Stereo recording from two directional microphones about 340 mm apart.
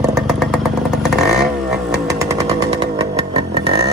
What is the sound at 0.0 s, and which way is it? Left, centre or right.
Motorcycle, centre.